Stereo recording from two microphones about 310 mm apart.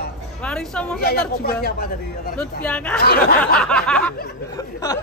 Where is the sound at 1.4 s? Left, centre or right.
Left.